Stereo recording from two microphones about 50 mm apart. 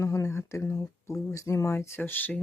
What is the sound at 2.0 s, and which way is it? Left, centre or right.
Speech, left.